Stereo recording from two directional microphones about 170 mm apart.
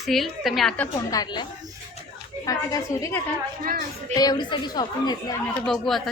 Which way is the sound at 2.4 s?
20° left (ahead or behind).